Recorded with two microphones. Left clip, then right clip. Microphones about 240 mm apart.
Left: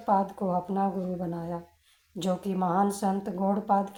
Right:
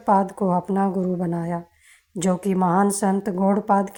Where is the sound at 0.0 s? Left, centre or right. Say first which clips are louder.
Right 7 dB; right.